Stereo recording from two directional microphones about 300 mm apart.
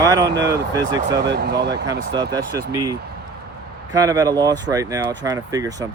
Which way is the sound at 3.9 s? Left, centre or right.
Centre.